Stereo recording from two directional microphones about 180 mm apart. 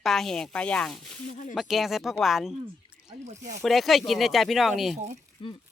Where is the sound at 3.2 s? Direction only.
40° right (ahead or behind).